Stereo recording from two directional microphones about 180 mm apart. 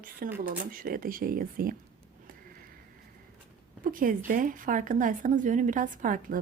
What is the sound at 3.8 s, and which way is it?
A woman's voice, 50° right (ahead or behind).